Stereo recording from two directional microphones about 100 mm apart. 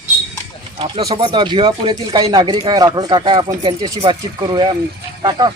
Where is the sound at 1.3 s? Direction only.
55° right (ahead or behind).